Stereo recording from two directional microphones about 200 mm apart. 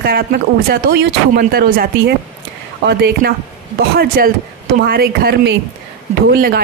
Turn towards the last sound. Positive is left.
turn(degrees=-50)  # may be behind; listen again after turning